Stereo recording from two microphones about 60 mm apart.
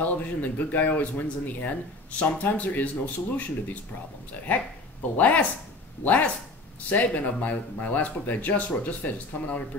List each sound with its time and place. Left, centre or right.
0.0 s speech: left
5.1 s speech: left